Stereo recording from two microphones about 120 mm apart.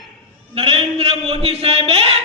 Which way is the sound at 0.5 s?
55° right (ahead or behind).